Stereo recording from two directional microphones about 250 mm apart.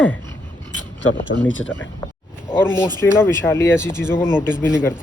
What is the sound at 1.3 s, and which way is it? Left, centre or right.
Speech, left.